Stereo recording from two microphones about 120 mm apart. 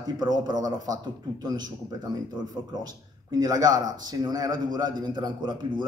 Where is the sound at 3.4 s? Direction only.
30° right (ahead or behind).